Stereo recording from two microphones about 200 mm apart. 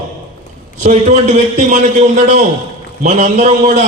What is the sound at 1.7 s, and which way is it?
A man's voice, 40° right (ahead or behind).